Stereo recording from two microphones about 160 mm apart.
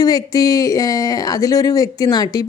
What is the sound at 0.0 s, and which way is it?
Speech, 25° left (ahead or behind).